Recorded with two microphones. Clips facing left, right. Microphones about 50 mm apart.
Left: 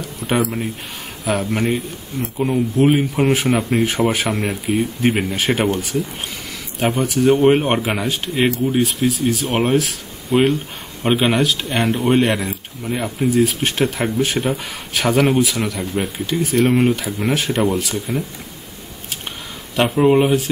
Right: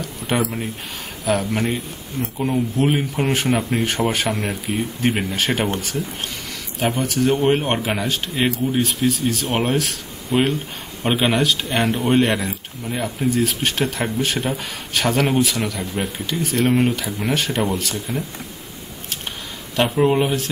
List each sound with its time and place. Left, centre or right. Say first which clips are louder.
0.0 s a sound: left 2 dB; centre
1.5 s speech: left 3 dB; centre
19.7 s speech: left 3 dB; centre